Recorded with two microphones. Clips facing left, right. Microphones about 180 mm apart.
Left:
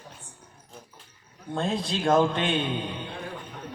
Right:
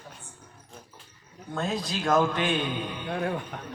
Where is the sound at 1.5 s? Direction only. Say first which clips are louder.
Left 2 dB; 30° left (ahead or behind).